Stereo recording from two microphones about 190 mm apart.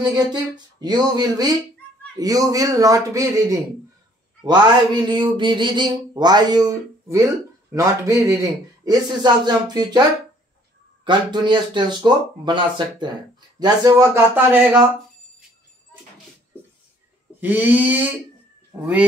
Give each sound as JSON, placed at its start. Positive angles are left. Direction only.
{"t": 0.0, "sound": "speech", "side_deg": -20}
{"t": 5.0, "sound": "speech", "side_deg": -25}
{"t": 11.1, "sound": "speech", "side_deg": -25}
{"t": 17.4, "sound": "speech", "side_deg": -10}